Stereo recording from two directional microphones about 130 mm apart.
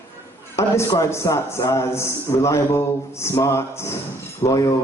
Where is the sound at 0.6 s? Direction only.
20° left (ahead or behind).